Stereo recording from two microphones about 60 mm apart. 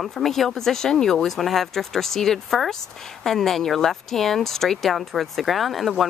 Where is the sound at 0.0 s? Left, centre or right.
Centre.